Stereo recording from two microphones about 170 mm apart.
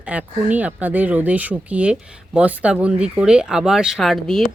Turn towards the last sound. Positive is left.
turn(degrees=0)  # may be behind; listen again after turning